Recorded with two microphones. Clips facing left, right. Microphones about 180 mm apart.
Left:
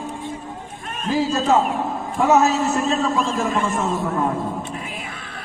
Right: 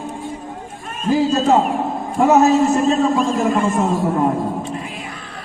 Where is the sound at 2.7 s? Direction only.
35° right (ahead or behind).